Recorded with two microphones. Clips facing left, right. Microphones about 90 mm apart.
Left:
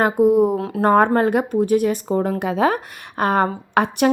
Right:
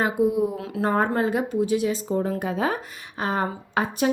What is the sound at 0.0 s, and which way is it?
Speech, 50° left (ahead or behind).